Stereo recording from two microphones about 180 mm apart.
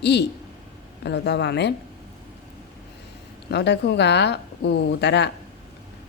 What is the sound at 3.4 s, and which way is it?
A woman's voice, 70° left (ahead or behind).